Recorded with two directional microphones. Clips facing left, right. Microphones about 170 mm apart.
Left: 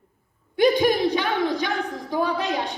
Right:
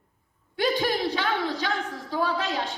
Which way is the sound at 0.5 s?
15° left (ahead or behind).